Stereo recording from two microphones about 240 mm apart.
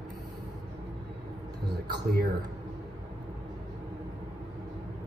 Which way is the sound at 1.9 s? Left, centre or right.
Right.